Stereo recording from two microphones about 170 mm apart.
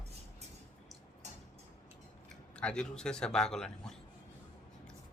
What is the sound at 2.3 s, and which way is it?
Speech, 5° left (ahead or behind).